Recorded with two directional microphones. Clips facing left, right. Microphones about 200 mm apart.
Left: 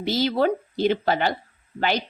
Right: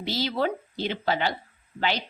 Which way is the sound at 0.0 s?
50° left (ahead or behind).